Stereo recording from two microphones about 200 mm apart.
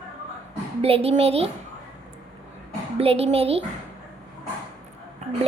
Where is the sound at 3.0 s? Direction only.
30° right (ahead or behind).